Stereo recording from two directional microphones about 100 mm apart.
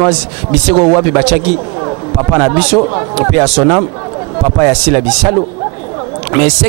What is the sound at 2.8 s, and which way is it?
A man's voice, 30° right (ahead or behind).